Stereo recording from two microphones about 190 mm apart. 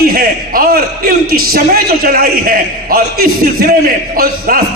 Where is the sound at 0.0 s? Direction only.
50° right (ahead or behind).